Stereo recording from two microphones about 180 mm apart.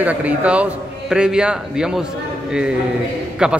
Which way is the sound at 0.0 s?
10° right (ahead or behind).